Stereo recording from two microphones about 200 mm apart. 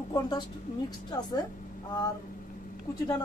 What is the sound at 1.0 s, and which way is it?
Speech, 20° left (ahead or behind).